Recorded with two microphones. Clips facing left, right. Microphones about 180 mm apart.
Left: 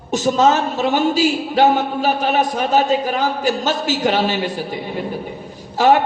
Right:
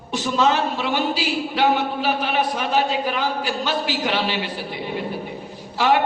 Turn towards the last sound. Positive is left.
turn(degrees=45)  # may be behind; listen again after turning